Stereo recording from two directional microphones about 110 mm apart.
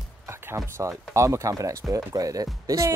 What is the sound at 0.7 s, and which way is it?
Speech, 25° right (ahead or behind).